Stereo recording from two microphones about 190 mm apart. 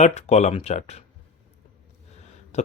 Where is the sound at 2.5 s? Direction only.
35° left (ahead or behind).